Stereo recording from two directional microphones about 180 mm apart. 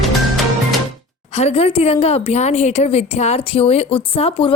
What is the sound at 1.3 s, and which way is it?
A woman's voice, 35° left (ahead or behind).